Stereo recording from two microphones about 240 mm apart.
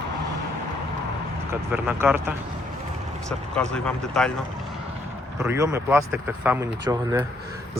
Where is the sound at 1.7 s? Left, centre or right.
Centre.